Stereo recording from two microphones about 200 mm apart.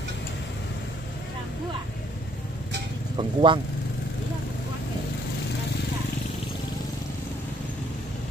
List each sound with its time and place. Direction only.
3.2 s speech: 25° right (ahead or behind)